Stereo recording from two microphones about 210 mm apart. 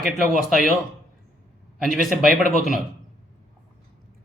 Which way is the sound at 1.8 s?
Centre (ahead or behind).